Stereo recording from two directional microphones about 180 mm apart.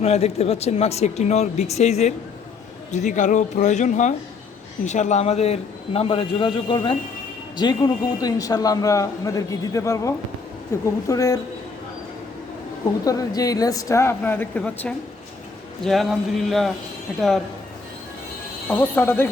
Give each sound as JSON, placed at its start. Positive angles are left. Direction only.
{"t": 0.0, "sound": "a man's voice", "side_deg": 35}
{"t": 13.1, "sound": "speech", "side_deg": 20}
{"t": 18.7, "sound": "speech", "side_deg": 10}